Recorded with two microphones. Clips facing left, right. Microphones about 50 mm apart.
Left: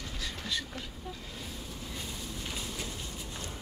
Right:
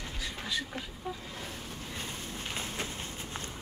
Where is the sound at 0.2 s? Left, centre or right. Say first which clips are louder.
Right 1 dB; centre.